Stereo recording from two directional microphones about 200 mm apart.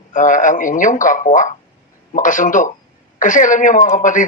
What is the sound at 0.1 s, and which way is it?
Speech, 40° left (ahead or behind).